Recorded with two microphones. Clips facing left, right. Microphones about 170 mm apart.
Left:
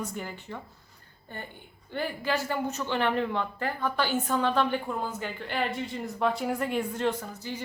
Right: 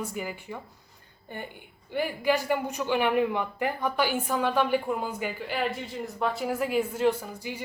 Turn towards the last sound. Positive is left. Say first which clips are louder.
# right 2 dB
turn(degrees=-10)  # may be behind; listen again after turning